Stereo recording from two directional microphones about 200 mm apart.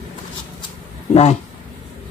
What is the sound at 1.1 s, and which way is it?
Speech, 35° left (ahead or behind).